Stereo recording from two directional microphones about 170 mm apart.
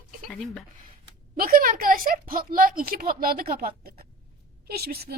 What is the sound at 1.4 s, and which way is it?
A woman's voice, 55° right (ahead or behind).